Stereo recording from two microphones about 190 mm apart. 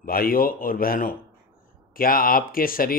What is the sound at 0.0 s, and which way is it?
Speech, 50° left (ahead or behind).